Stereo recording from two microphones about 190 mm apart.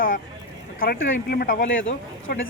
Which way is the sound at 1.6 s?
85° left.